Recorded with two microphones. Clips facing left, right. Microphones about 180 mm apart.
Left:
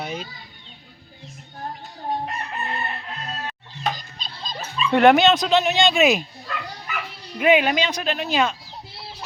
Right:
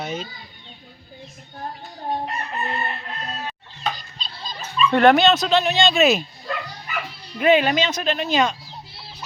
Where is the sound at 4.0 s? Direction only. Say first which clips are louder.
Left 1 dB; 45° left (ahead or behind).